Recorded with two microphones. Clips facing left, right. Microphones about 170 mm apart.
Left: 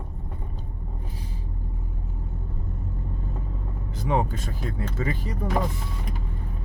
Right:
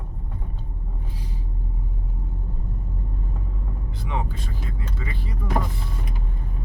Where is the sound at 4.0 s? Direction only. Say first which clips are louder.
Left 6 dB; 40° left (ahead or behind).